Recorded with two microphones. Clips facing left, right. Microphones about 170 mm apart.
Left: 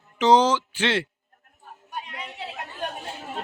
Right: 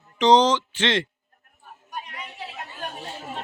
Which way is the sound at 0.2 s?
10° left (ahead or behind).